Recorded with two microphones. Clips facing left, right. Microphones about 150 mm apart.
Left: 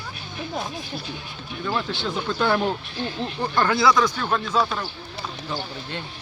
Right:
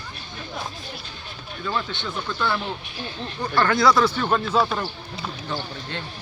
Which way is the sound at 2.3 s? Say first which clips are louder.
Left 5 dB; 50° left (ahead or behind).